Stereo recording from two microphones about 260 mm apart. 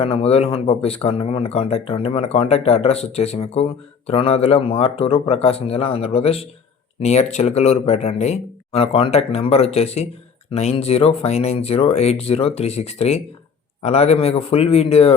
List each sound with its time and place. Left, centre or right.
0.0 s speech: left